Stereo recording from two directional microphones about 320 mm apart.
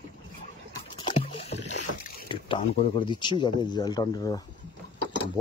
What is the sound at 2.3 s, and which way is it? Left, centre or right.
Speech, centre.